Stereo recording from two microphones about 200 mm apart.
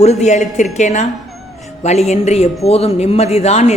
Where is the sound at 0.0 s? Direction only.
35° left (ahead or behind).